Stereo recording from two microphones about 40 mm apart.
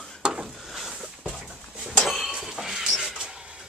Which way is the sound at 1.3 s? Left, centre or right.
Centre.